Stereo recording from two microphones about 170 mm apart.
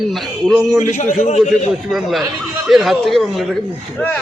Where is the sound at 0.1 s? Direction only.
Centre (ahead or behind).